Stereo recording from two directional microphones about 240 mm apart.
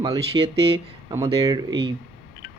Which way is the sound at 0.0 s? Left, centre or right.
Centre.